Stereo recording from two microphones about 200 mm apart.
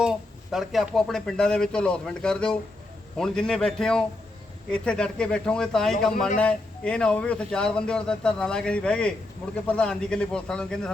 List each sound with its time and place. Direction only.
0.0 s a man's voice: centre (ahead or behind)